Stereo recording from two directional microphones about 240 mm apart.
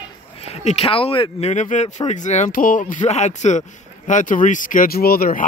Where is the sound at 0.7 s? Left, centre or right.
Left.